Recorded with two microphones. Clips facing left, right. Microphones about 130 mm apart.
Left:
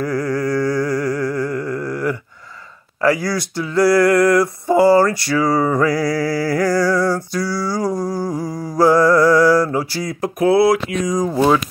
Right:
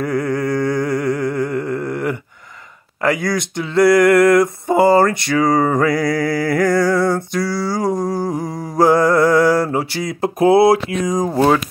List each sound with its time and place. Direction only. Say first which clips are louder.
0.0 s speech: right 1 dB; 25° right (ahead or behind)
0.4 s chant: even; 20° right (ahead or behind)
3.1 s speech: even; 20° right (ahead or behind)
4.1 s mantra: right 2 dB; 60° right (ahead or behind)
4.4 s speech: even; 20° right (ahead or behind)
5.4 s music: right 2 dB; 55° right (ahead or behind)
5.9 s mantra: right 1 dB; 55° right (ahead or behind)
6.7 s speech: right 1 dB; 25° right (ahead or behind)
7.4 s music: right 1 dB; 25° right (ahead or behind)
9.1 s mantra: left 1 dB; 55° right (ahead or behind)
9.6 s mantra: even; 25° right (ahead or behind)
11.0 s music: right 1 dB; 55° right (ahead or behind)
11.3 s mantra: right 1 dB; 60° right (ahead or behind)